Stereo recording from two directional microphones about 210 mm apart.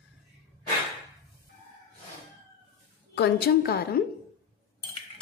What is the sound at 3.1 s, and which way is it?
Speech, 50° left (ahead or behind).